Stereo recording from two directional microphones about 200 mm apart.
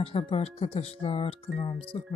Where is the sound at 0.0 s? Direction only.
30° left (ahead or behind).